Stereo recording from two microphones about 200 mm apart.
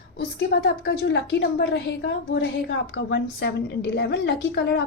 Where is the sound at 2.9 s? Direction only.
55° left (ahead or behind).